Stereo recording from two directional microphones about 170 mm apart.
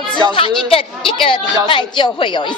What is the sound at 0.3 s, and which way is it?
A woman's voice, 30° left (ahead or behind).